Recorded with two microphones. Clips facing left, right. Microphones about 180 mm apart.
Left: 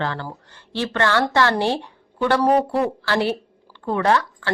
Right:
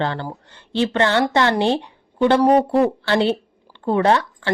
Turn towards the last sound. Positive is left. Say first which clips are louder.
# right 2 dB
turn(degrees=-25)  # may be behind; listen again after turning